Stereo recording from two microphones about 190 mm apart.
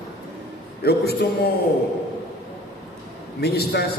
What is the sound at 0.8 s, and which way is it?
Speech, 55° left (ahead or behind).